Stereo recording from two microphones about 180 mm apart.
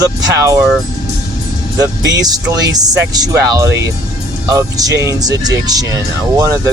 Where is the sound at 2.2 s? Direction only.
20° right (ahead or behind).